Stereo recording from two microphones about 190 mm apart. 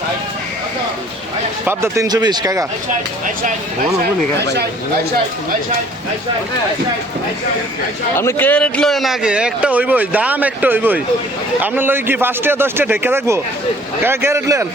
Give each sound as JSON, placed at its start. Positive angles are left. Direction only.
{"t": 1.6, "sound": "a man's voice", "side_deg": -15}
{"t": 4.4, "sound": "speech", "side_deg": -60}
{"t": 8.1, "sound": "a man's voice", "side_deg": 15}